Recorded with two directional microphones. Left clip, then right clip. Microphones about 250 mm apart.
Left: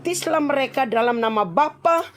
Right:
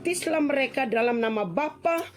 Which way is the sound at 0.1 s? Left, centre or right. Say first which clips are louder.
Left 4 dB; centre.